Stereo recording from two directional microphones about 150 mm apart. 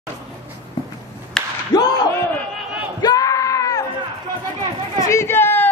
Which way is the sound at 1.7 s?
25° left (ahead or behind).